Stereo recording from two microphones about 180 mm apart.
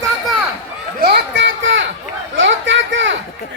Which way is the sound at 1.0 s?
60° right (ahead or behind).